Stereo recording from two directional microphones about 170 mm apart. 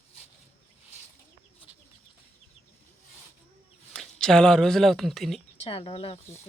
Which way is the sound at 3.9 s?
5° left (ahead or behind).